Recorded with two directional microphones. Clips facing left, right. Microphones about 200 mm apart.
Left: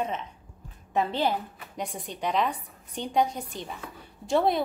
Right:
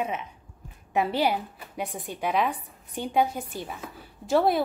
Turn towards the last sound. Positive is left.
turn(degrees=-5)  # may be behind; listen again after turning